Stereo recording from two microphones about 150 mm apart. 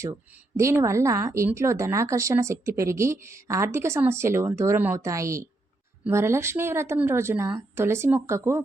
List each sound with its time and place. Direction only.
0.0 s a woman's voice: 20° right (ahead or behind)